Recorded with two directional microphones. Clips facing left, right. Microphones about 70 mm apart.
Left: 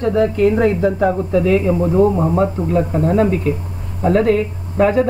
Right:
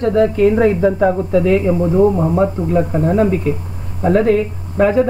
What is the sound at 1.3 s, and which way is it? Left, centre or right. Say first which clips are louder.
Speech: even; right.